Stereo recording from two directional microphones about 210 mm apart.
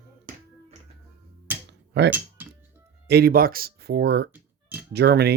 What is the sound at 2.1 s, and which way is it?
Cutlery, 10° right (ahead or behind).